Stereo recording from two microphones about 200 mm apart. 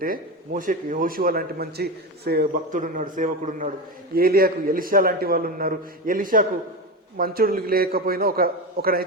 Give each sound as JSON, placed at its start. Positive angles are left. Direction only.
{"t": 0.0, "sound": "a man's voice", "side_deg": -45}